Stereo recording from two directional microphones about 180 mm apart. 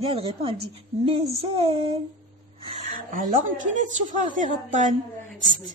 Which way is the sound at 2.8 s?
45° right (ahead or behind).